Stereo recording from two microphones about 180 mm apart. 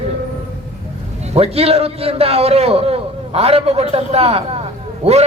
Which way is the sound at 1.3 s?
35° right (ahead or behind).